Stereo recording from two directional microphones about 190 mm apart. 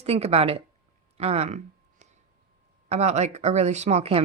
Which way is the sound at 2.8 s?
35° right (ahead or behind).